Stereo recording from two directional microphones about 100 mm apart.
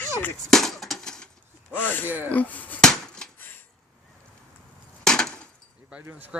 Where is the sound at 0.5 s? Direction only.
Centre (ahead or behind).